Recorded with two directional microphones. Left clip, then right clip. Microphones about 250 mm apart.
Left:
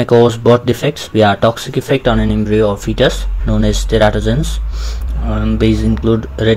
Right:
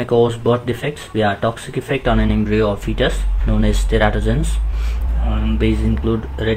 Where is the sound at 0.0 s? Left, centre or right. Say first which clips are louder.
Left 6 dB; left.